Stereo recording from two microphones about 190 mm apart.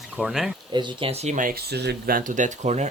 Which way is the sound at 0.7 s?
25° right (ahead or behind).